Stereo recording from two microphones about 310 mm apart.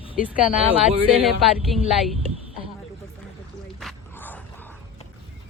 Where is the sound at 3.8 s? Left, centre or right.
Centre.